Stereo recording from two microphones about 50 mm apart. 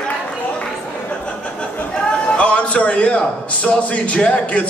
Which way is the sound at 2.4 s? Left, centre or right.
Left.